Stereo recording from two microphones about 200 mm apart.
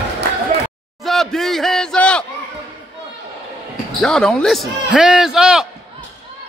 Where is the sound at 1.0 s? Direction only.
Centre (ahead or behind).